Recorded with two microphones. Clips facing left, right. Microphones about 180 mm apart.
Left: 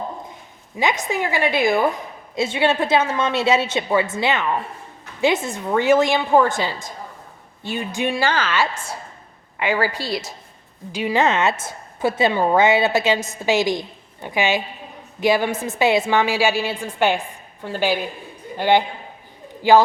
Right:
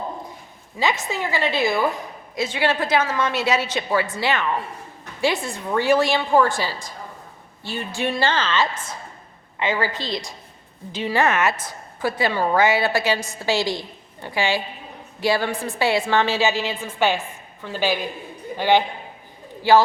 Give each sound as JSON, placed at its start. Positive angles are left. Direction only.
{"t": 0.8, "sound": "a woman's voice", "side_deg": 15}